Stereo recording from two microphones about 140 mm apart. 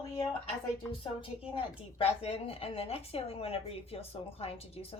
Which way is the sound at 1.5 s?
40° left (ahead or behind).